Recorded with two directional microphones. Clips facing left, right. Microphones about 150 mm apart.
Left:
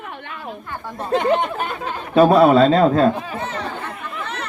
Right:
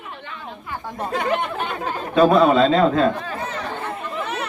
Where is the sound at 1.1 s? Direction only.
20° left (ahead or behind).